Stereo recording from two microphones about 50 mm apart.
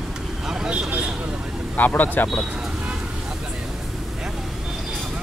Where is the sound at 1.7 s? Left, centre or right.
Left.